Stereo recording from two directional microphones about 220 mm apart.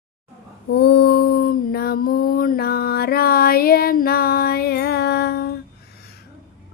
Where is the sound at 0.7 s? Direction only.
50° left (ahead or behind).